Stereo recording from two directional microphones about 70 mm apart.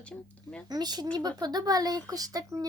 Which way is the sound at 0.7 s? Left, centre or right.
Right.